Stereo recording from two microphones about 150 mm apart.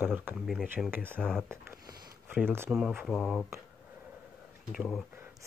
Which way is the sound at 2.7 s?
5° right (ahead or behind).